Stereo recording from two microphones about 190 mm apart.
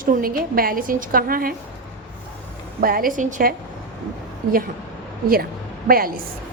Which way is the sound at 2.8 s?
50° right (ahead or behind).